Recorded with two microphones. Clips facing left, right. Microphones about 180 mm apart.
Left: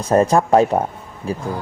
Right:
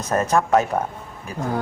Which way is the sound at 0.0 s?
30° left (ahead or behind).